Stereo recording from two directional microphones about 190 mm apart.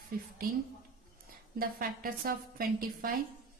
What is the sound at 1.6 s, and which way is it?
A woman's voice, 50° right (ahead or behind).